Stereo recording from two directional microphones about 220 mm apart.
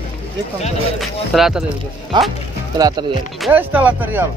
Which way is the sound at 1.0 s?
Centre (ahead or behind).